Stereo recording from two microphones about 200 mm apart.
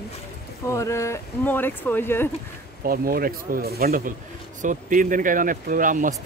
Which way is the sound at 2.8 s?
45° right (ahead or behind).